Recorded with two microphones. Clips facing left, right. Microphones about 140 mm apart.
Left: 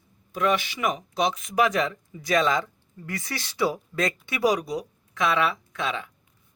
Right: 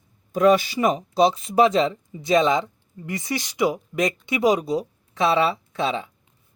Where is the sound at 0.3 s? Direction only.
40° right (ahead or behind).